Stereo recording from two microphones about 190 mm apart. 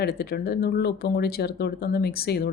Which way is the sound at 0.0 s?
55° left (ahead or behind).